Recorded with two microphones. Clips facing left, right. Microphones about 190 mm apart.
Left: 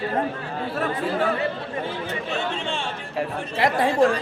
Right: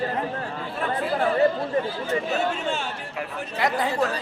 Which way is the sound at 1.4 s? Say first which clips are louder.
Right 6 dB; 40° right (ahead or behind).